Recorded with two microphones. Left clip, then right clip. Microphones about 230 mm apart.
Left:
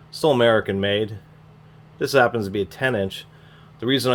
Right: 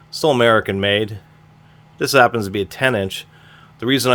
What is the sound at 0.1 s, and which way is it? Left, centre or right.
Speech, right.